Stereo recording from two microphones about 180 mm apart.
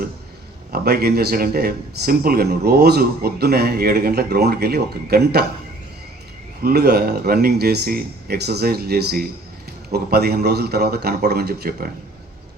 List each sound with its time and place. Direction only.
0.7 s speech: 60° right (ahead or behind)
6.6 s speech: 60° right (ahead or behind)